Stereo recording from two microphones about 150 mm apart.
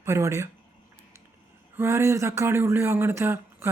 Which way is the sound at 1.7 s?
20° right (ahead or behind).